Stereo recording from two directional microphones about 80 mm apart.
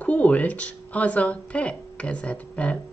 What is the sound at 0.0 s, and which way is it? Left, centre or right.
Speech, centre.